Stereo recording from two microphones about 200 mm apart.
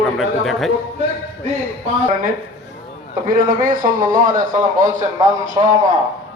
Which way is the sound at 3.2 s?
45° right (ahead or behind).